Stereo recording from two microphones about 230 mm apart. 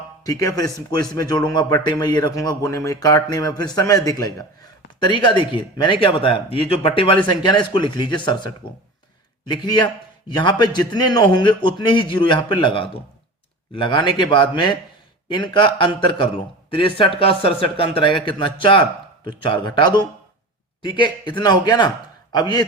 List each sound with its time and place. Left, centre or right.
0.3 s a man's voice: centre